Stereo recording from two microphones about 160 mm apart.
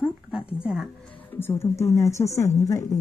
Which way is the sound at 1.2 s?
15° left (ahead or behind).